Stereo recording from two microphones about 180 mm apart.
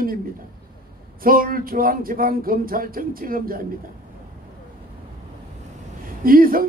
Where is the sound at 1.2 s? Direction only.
55° right (ahead or behind).